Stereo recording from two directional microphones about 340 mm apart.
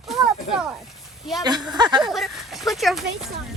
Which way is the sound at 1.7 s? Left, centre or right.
Centre.